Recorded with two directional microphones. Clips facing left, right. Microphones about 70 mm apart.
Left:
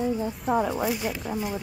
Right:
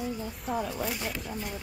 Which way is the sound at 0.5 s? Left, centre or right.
Left.